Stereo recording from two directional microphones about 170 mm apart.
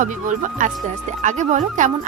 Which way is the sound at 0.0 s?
50° right (ahead or behind).